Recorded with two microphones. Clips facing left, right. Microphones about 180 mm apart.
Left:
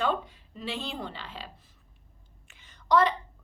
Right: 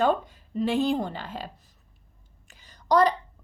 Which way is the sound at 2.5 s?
40° right (ahead or behind).